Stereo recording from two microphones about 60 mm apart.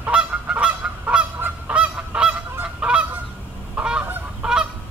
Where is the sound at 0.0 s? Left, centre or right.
Right.